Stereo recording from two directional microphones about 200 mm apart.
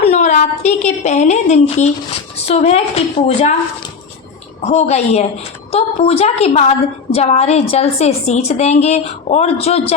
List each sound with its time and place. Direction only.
0.0 s a woman's voice: 35° left (ahead or behind)
4.6 s a woman's voice: 35° left (ahead or behind)